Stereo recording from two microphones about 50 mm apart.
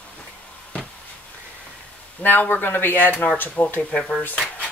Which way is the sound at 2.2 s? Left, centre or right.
Left.